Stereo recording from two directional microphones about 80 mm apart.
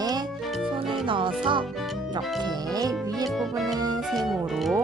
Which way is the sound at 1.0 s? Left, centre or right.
Right.